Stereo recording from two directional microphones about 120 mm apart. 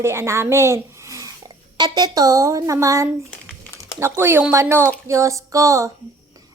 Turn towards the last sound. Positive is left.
turn(degrees=-25)  # may be behind; listen again after turning